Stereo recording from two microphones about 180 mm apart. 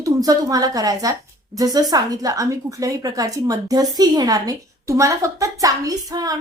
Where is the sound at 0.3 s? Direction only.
20° right (ahead or behind).